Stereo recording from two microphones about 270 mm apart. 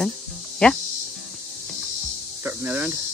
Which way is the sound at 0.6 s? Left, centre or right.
Centre.